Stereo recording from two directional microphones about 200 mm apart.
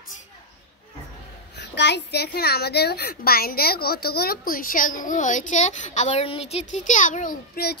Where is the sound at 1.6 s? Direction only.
60° left (ahead or behind).